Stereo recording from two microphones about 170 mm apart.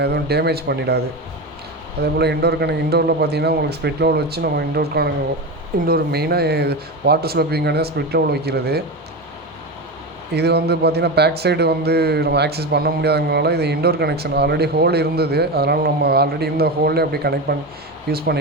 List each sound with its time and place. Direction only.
0.0 s speech: 70° right (ahead or behind)
2.1 s speech: 70° right (ahead or behind)
10.3 s speech: 75° right (ahead or behind)